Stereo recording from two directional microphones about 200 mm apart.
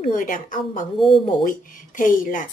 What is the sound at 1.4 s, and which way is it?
A woman's voice, 40° left (ahead or behind).